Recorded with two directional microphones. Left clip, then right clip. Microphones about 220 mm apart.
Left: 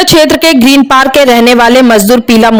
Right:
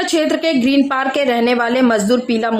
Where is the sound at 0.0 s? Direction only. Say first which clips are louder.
Left 11 dB; 40° left (ahead or behind).